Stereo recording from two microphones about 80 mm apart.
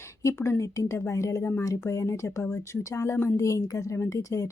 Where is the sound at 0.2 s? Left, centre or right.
Left.